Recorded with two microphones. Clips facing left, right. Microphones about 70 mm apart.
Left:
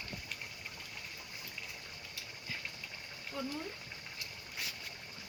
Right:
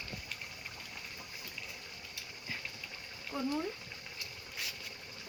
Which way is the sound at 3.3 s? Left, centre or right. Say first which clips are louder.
Right 4 dB; right.